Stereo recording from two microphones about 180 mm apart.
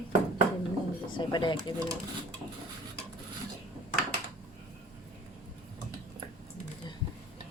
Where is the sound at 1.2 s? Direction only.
25° left (ahead or behind).